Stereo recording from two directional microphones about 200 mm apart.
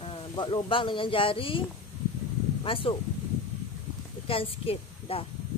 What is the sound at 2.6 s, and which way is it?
Speech, 25° left (ahead or behind).